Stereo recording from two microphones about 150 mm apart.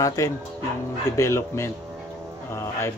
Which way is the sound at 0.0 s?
20° left (ahead or behind).